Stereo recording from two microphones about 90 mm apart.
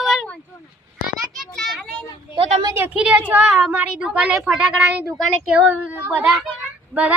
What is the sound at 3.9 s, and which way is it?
A woman's voice, 10° right (ahead or behind).